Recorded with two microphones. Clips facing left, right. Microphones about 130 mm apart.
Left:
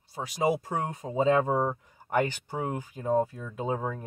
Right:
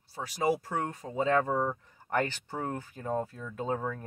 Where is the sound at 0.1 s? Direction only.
20° left (ahead or behind).